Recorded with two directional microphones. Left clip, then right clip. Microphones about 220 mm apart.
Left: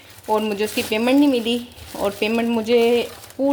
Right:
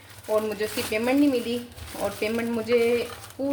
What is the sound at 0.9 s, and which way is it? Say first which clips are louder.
Speech: left 5 dB; 35° left (ahead or behind).